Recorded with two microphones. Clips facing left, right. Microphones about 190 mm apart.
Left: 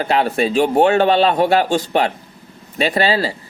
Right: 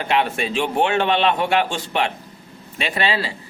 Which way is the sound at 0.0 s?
35° left (ahead or behind).